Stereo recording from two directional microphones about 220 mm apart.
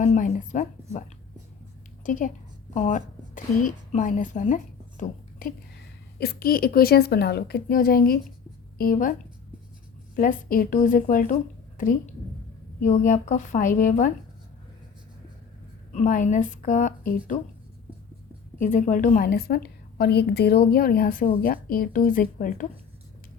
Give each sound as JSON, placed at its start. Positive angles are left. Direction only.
{"t": 0.0, "sound": "speech", "side_deg": 35}
{"t": 2.0, "sound": "a woman's voice", "side_deg": 35}
{"t": 10.2, "sound": "a woman's voice", "side_deg": 40}
{"t": 15.9, "sound": "a woman's voice", "side_deg": 35}
{"t": 18.6, "sound": "a woman's voice", "side_deg": 35}